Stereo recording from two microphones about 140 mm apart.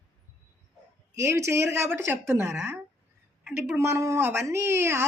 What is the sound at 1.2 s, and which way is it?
A woman's voice, 20° right (ahead or behind).